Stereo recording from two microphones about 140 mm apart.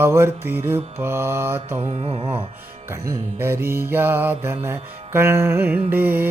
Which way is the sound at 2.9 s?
20° right (ahead or behind).